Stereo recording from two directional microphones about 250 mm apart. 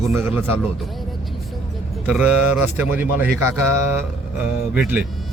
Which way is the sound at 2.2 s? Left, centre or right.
Centre.